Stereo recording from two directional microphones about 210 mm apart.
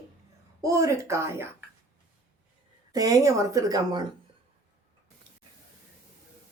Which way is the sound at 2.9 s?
15° right (ahead or behind).